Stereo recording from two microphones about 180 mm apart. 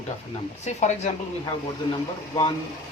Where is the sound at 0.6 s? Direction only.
40° left (ahead or behind).